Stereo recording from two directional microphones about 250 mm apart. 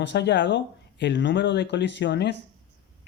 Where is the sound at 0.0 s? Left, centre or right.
Left.